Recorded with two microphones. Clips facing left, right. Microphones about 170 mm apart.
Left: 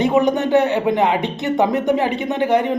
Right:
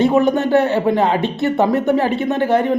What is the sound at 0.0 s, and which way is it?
Speech, 20° left (ahead or behind).